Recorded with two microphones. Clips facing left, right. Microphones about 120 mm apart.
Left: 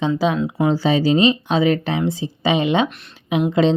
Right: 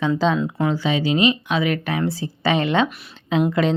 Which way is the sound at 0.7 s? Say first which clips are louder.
Left 6 dB; 35° left (ahead or behind).